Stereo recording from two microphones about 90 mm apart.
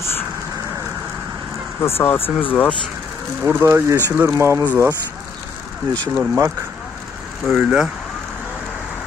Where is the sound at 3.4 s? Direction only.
30° right (ahead or behind).